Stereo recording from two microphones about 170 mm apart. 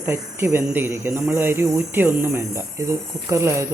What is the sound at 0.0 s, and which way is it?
Speech, 15° right (ahead or behind).